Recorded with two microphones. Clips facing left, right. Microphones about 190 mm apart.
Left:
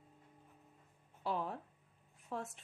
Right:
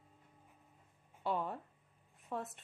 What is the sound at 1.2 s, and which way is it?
Speech, centre (ahead or behind).